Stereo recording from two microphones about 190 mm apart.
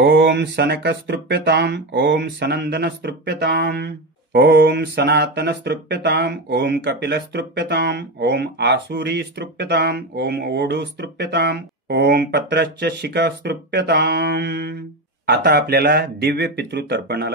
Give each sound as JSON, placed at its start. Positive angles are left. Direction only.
{"t": 0.0, "sound": "speech", "side_deg": -70}